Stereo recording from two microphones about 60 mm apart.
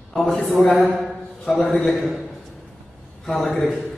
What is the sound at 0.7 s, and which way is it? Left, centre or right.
Speech, right.